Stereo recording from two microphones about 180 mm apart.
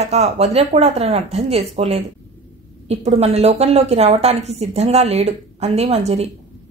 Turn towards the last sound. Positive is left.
turn(degrees=-35)  # may be behind; listen again after turning